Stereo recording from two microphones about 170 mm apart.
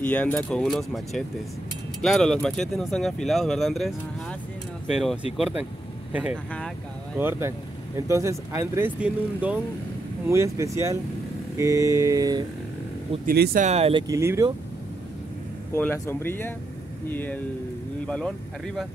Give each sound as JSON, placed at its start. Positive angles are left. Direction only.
{"t": 0.0, "sound": "speech", "side_deg": 10}
{"t": 11.5, "sound": "mantra", "side_deg": -20}
{"t": 13.2, "sound": "speech", "side_deg": -60}
{"t": 13.7, "sound": "speech", "side_deg": -35}
{"t": 14.0, "sound": "mantra", "side_deg": -15}
{"t": 15.7, "sound": "speech", "side_deg": 15}